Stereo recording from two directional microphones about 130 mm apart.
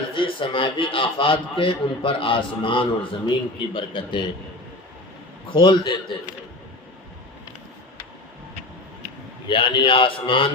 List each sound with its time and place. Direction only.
0.1 s a man's voice: 40° left (ahead or behind)
5.5 s a man's voice: 40° left (ahead or behind)
9.5 s a man's voice: 40° left (ahead or behind)